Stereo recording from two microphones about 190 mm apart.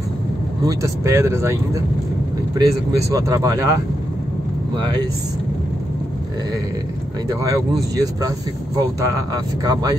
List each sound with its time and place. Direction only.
0.7 s speech: 15° right (ahead or behind)
7.9 s speech: 20° right (ahead or behind)